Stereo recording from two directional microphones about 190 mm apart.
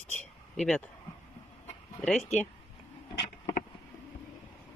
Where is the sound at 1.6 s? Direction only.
5° left (ahead or behind).